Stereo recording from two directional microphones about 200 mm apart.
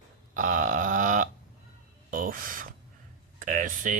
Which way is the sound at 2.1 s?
45° right (ahead or behind).